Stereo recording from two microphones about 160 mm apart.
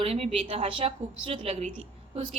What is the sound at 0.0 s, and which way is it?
A woman's voice, 40° right (ahead or behind).